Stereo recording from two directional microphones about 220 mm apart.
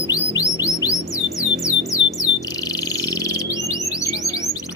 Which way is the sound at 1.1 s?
15° left (ahead or behind).